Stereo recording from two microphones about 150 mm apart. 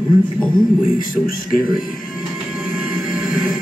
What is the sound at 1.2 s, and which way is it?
Speech, 70° left (ahead or behind).